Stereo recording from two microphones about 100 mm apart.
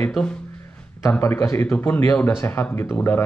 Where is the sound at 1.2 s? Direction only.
30° left (ahead or behind).